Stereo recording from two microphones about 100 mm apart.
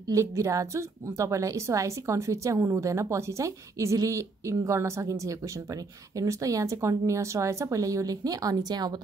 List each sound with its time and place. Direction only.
0.1 s a woman's voice: 30° right (ahead or behind)